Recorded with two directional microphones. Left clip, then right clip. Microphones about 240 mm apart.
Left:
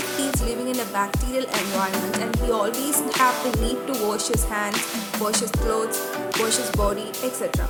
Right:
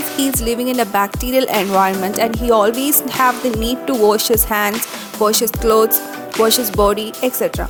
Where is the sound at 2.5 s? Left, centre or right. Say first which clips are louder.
Right 9 dB; right.